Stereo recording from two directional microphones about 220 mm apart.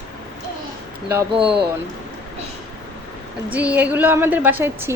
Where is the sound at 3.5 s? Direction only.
5° right (ahead or behind).